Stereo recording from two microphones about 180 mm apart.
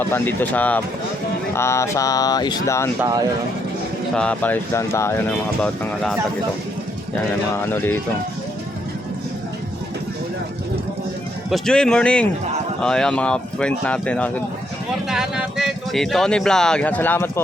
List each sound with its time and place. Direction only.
0.1 s speech: 10° left (ahead or behind)
4.1 s speech: 5° left (ahead or behind)
5.6 s a man's voice: 5° left (ahead or behind)
7.5 s speech: 10° left (ahead or behind)
11.5 s a man's voice: 5° left (ahead or behind)
15.1 s speech: 5° right (ahead or behind)